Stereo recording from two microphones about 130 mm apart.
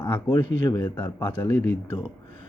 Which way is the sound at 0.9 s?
15° left (ahead or behind).